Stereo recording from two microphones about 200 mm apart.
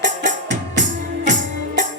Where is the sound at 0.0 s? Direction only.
40° right (ahead or behind).